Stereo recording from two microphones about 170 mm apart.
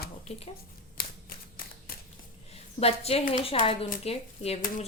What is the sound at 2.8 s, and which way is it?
Speech, 35° left (ahead or behind).